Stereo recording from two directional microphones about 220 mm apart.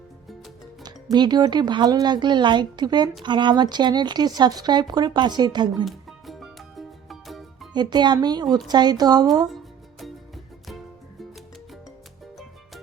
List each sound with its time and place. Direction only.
1.1 s speech: 20° right (ahead or behind)
5.7 s music: centre (ahead or behind)
7.7 s a woman's voice: 20° right (ahead or behind)
10.0 s music: centre (ahead or behind)